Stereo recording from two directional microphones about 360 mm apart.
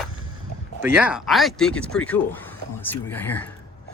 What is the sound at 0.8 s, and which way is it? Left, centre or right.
Speech, centre.